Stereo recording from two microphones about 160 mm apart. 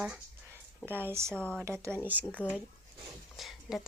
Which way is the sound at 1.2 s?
5° left (ahead or behind).